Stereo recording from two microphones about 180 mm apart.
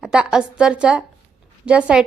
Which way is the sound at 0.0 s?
5° right (ahead or behind).